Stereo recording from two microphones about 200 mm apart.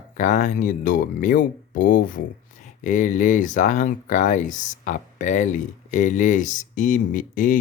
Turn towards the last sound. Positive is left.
turn(degrees=40)  # may be behind; listen again after turning